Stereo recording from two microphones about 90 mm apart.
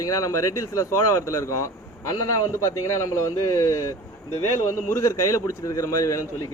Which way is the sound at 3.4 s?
40° left (ahead or behind).